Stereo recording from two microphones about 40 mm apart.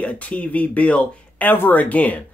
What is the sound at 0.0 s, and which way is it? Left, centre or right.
Speech, left.